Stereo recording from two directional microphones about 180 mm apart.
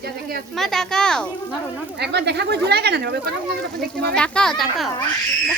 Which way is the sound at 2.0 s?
70° right (ahead or behind).